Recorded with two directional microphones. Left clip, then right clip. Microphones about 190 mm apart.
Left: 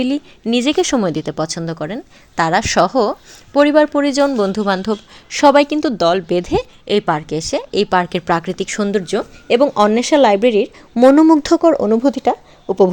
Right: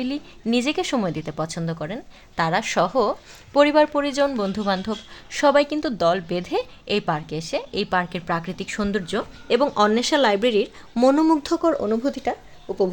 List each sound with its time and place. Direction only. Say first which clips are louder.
0.4 s speech: left 7 dB; 15° left (ahead or behind); by 12.9 s 45° left (ahead or behind)